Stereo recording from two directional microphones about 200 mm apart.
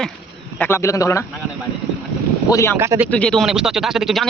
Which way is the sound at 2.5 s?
15° left (ahead or behind).